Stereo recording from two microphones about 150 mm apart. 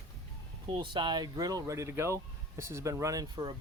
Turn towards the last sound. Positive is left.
turn(degrees=-25)  # may be behind; listen again after turning